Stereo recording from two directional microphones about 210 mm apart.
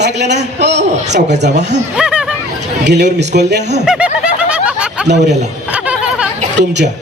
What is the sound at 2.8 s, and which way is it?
A man's voice, 55° right (ahead or behind).